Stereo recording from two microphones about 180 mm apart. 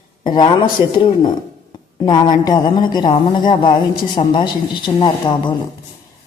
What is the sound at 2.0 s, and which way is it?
A man's voice, 25° left (ahead or behind).